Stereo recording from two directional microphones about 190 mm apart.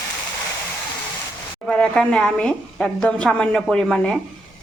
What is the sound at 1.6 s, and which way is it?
A woman's voice, 5° left (ahead or behind).